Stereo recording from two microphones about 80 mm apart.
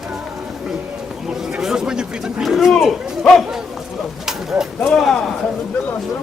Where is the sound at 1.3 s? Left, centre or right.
Centre.